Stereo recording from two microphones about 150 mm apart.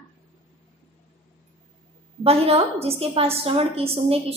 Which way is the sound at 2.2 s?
40° right (ahead or behind).